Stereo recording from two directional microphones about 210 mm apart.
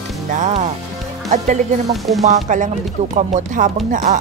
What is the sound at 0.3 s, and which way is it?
Speech, 35° right (ahead or behind).